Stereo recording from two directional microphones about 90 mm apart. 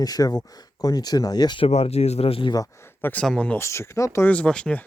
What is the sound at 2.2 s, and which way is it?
Speech, 80° left.